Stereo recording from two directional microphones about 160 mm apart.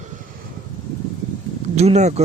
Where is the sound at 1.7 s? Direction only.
45° right (ahead or behind).